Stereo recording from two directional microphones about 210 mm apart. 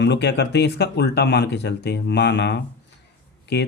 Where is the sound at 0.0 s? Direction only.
55° left (ahead or behind).